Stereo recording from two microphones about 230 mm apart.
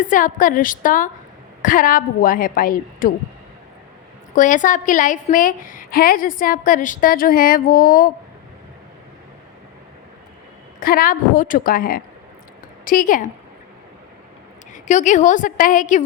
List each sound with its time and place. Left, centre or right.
0.0 s a woman's voice: left
4.4 s a woman's voice: left
10.8 s a woman's voice: left
14.7 s a woman's voice: left